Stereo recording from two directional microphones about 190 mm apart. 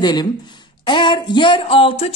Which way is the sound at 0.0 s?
20° left (ahead or behind).